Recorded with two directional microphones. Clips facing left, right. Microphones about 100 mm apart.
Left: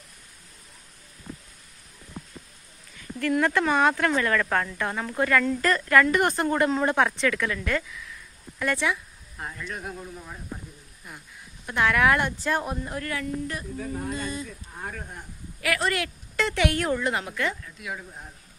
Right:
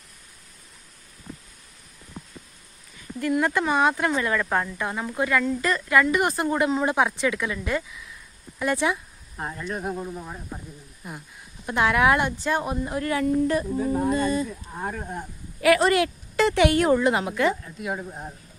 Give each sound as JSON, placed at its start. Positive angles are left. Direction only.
{"t": 3.2, "sound": "speech", "side_deg": -10}
{"t": 12.3, "sound": "speech", "side_deg": -5}
{"t": 13.9, "sound": "speech", "side_deg": -40}
{"t": 14.8, "sound": "speech", "side_deg": -20}
{"t": 15.1, "sound": "a sound", "side_deg": -25}
{"t": 16.4, "sound": "speech", "side_deg": -10}
{"t": 17.6, "sound": "speech", "side_deg": -35}